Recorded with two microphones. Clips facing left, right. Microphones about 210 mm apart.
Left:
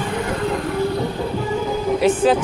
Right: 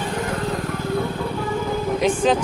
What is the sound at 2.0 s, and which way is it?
Speech, 5° left (ahead or behind).